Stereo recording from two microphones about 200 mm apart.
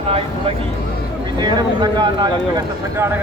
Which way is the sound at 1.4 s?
20° right (ahead or behind).